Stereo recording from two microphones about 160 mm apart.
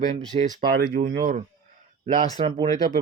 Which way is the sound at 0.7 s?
75° right (ahead or behind).